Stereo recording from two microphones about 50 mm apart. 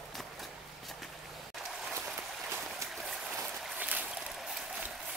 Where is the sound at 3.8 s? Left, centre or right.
Right.